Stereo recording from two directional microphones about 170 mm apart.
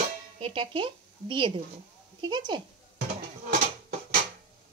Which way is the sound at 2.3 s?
25° right (ahead or behind).